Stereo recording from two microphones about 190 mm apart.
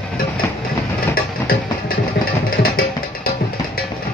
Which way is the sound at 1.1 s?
50° left (ahead or behind).